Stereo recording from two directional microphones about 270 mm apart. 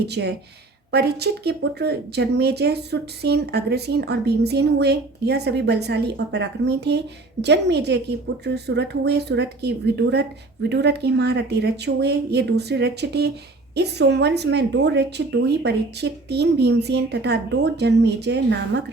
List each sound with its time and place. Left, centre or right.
0.0 s speech: right